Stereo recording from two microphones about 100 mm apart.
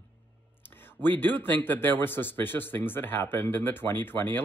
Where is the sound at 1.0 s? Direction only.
20° left (ahead or behind).